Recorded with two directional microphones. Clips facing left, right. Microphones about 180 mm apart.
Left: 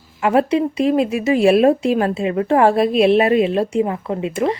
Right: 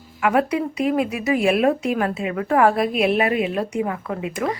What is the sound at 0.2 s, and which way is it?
Speech, 30° left (ahead or behind).